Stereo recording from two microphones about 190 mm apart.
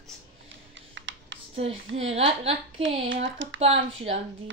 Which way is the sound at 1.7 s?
90° right.